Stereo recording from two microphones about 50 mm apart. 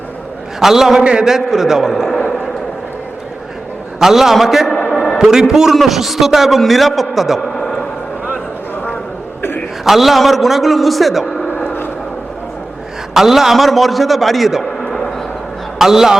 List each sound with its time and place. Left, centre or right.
0.6 s a man's voice: centre
4.0 s a man's voice: centre
7.5 s a sound: centre
9.8 s a man's voice: centre
11.4 s vehicle: left
13.1 s a man's voice: centre
14.8 s a sound: centre
15.8 s a man's voice: centre